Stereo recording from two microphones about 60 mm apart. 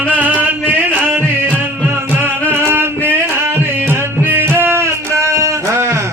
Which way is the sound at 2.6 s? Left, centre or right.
Right.